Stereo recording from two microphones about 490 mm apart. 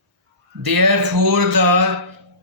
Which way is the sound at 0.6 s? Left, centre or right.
Right.